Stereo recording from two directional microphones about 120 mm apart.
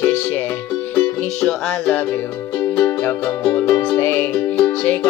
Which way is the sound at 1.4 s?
5° left (ahead or behind).